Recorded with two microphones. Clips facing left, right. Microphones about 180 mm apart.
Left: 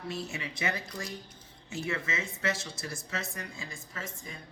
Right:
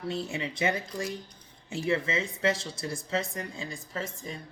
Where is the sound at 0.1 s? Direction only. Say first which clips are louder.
Right 5 dB; 30° right (ahead or behind).